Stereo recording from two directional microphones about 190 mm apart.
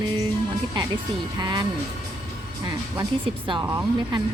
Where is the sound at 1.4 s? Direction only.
25° right (ahead or behind).